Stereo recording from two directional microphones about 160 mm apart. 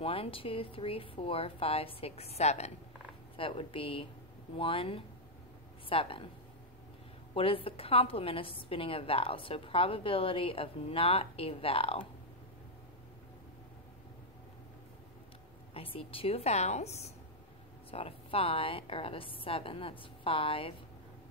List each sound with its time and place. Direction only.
0.0 s a woman's voice: 35° left (ahead or behind)
7.3 s a woman's voice: 35° left (ahead or behind)
15.7 s a woman's voice: 35° left (ahead or behind)